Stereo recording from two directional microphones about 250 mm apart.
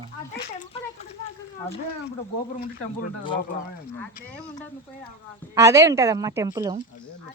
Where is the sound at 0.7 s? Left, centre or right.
Left.